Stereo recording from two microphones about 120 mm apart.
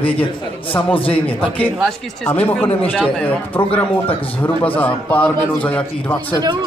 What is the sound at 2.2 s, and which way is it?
A man's voice, 15° left (ahead or behind).